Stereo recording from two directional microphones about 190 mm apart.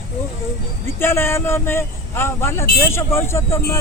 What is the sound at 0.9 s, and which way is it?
Speech, 10° left (ahead or behind).